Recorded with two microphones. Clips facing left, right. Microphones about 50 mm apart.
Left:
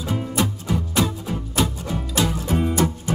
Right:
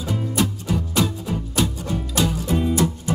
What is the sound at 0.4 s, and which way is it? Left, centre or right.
Music, left.